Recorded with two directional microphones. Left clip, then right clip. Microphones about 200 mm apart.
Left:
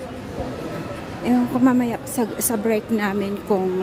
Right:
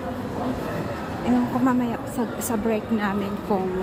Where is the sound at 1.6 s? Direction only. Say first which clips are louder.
Left 4 dB; 40° left (ahead or behind).